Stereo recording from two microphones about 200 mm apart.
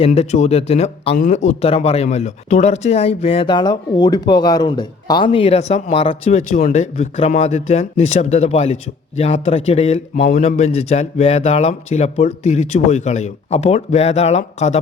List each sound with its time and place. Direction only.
0.0 s speech: 30° left (ahead or behind)